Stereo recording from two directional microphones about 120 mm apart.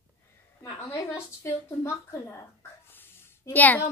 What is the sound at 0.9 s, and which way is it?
A woman's voice, 20° left (ahead or behind).